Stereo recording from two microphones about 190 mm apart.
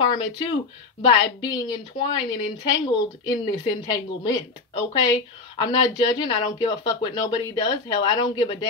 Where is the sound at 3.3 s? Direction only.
20° left (ahead or behind).